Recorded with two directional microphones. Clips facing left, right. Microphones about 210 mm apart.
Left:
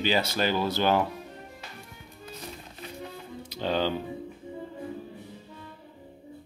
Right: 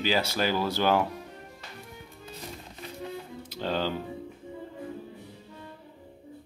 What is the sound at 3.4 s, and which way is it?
Music, centre (ahead or behind).